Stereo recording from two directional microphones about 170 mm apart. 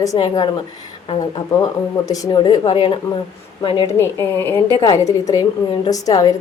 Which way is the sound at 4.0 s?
15° left (ahead or behind).